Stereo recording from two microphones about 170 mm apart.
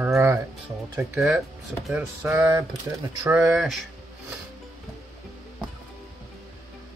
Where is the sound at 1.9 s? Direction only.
10° right (ahead or behind).